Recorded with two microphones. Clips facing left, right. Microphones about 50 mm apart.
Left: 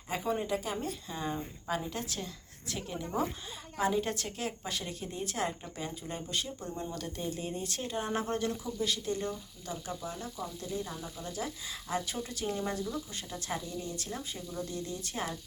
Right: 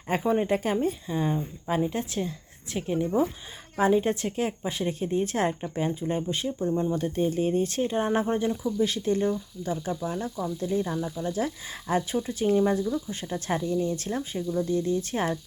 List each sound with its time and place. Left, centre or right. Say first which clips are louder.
0.1 s speech: right 8 dB; right
0.8 s speech: right 10 dB; right
8.8 s speech: right 8 dB; right
12.1 s speech: right 11 dB; right
14.6 s speech: right 12 dB; right